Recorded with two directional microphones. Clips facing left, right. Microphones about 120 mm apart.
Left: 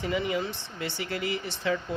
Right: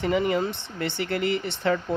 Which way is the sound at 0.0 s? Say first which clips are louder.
Right 5 dB; 55° right (ahead or behind).